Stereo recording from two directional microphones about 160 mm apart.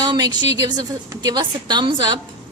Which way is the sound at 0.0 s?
25° right (ahead or behind).